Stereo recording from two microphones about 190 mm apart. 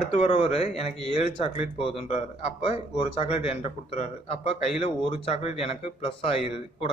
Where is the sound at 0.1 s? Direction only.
35° left (ahead or behind).